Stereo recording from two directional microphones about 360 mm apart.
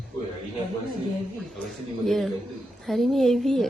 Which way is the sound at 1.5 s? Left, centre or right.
Centre.